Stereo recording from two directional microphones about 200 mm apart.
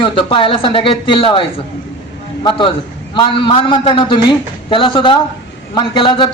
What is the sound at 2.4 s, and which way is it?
A man's voice, 25° left (ahead or behind).